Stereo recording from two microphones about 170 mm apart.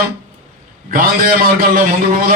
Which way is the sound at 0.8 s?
55° right (ahead or behind).